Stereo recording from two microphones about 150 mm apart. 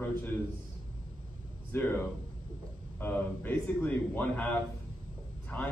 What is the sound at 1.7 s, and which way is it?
A man's voice, 15° left (ahead or behind).